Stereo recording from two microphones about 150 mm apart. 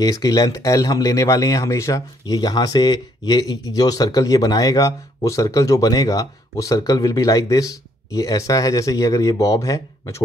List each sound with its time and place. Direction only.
0.0 s speech: 25° left (ahead or behind)